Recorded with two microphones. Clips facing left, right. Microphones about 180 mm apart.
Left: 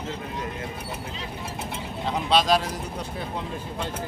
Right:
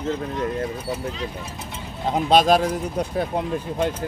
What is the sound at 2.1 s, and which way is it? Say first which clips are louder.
Speech: right 5 dB; 45° right (ahead or behind).